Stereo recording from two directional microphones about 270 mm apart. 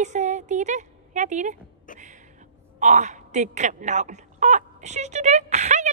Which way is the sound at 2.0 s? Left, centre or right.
Right.